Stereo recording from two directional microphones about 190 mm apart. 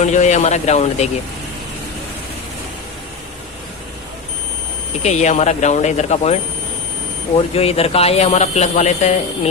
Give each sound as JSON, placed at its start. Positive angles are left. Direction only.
{"t": 0.0, "sound": "speech", "side_deg": 40}
{"t": 5.0, "sound": "speech", "side_deg": 35}
{"t": 7.3, "sound": "speech", "side_deg": 30}